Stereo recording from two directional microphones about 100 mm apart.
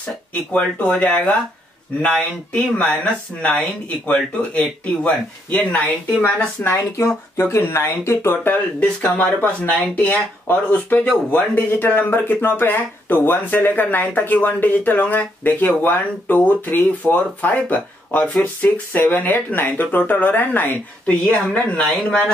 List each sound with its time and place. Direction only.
0.3 s speech: 15° left (ahead or behind)